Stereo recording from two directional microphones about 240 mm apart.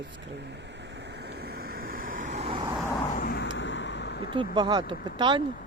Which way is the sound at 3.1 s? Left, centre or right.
Left.